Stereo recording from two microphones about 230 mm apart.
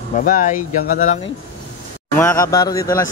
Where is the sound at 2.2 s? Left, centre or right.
Centre.